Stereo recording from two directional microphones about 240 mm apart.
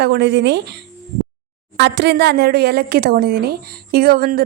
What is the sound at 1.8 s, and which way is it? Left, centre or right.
Speech, right.